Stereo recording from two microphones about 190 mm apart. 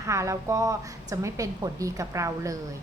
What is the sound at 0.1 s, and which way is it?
A woman's voice, 15° right (ahead or behind).